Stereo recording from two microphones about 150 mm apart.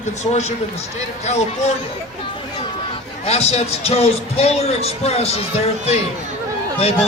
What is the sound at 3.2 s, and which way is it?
A man's voice, 45° left (ahead or behind).